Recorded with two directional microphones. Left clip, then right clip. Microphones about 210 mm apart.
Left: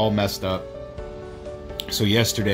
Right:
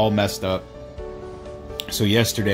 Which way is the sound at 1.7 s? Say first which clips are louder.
Right 1 dB; centre (ahead or behind).